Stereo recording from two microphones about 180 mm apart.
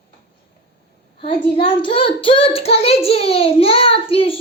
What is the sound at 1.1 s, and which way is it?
A child's voice, 30° left (ahead or behind).